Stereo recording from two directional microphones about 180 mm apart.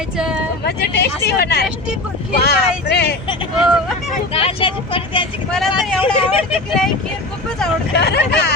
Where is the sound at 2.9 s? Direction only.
65° left (ahead or behind).